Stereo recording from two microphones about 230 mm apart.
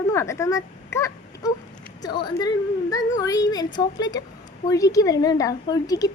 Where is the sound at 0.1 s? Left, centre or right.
Centre.